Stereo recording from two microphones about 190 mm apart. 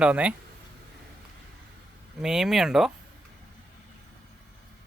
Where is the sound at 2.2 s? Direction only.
5° right (ahead or behind).